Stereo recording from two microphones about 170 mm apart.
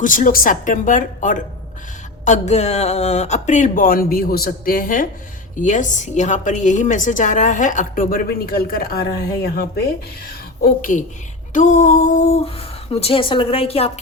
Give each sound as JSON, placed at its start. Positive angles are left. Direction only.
{"t": 0.0, "sound": "a woman's voice", "side_deg": 50}
{"t": 10.6, "sound": "a woman's voice", "side_deg": 50}